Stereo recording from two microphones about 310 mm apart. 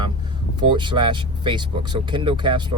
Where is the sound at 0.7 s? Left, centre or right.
Centre.